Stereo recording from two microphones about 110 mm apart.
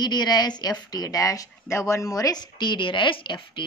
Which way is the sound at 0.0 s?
40° left (ahead or behind).